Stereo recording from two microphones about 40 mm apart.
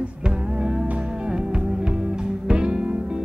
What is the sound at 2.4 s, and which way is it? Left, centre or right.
Music, right.